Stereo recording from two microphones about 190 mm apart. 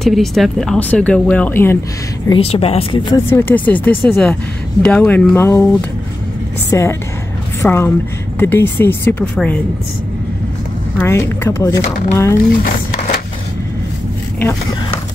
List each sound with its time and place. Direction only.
0.0 s speech: centre (ahead or behind)
2.2 s speech: 30° left (ahead or behind)
3.3 s speech: 10° left (ahead or behind)
11.0 s speech: 15° left (ahead or behind)
12.6 s a sound: 45° left (ahead or behind)